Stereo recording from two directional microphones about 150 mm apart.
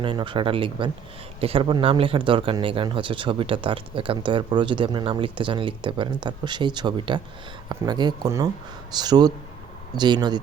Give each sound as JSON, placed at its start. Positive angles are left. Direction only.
{"t": 0.0, "sound": "speech", "side_deg": -35}